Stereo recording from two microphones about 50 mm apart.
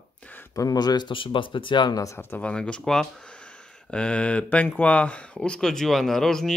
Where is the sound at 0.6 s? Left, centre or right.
Left.